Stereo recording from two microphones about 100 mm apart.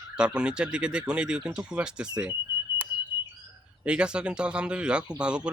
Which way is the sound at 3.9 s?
10° right (ahead or behind).